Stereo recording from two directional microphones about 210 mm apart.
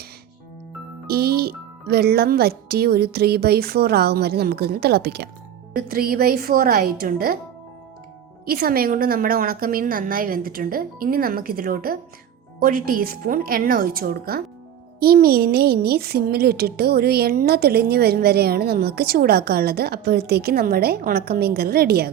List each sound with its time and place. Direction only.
1.0 s speech: 50° right (ahead or behind)
8.4 s speech: 45° right (ahead or behind)